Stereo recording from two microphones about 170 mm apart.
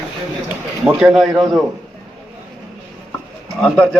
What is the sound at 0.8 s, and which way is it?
Speech, 5° right (ahead or behind).